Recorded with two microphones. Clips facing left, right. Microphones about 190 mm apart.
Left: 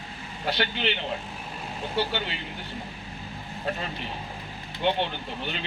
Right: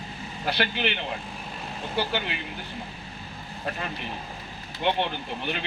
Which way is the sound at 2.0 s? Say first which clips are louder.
Even; 60° right (ahead or behind).